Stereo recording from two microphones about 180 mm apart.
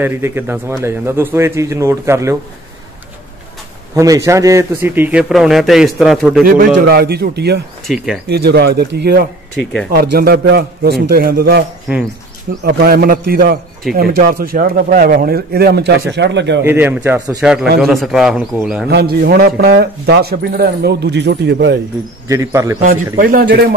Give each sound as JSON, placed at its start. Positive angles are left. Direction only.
{"t": 0.0, "sound": "a man's voice", "side_deg": -15}
{"t": 3.9, "sound": "a man's voice", "side_deg": -20}
{"t": 6.4, "sound": "a man's voice", "side_deg": -60}
{"t": 7.8, "sound": "speech", "side_deg": 0}
{"t": 8.3, "sound": "a man's voice", "side_deg": -65}
{"t": 12.6, "sound": "a man's voice", "side_deg": -60}
{"t": 16.6, "sound": "a man's voice", "side_deg": -10}
{"t": 18.9, "sound": "a man's voice", "side_deg": -60}
{"t": 22.3, "sound": "a man's voice", "side_deg": -15}
{"t": 22.8, "sound": "a man's voice", "side_deg": -50}